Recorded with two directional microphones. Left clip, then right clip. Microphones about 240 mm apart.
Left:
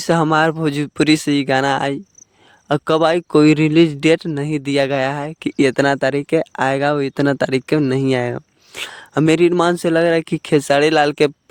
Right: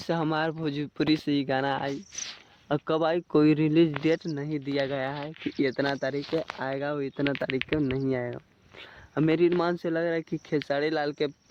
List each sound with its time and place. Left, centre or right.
0.0 s speech: left